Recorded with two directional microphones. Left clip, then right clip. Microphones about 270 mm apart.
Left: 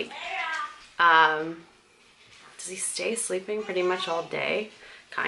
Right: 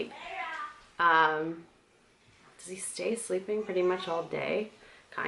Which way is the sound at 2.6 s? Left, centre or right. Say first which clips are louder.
Left 4 dB; centre.